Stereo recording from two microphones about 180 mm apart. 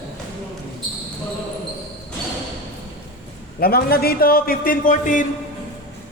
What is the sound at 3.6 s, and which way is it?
A man's voice, 60° left (ahead or behind).